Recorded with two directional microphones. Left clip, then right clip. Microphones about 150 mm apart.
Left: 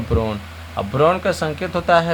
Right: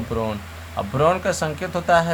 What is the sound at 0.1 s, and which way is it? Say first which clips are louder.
Speech: left 4 dB; 20° left (ahead or behind).